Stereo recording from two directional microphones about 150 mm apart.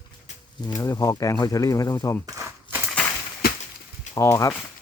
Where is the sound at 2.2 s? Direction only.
15° right (ahead or behind).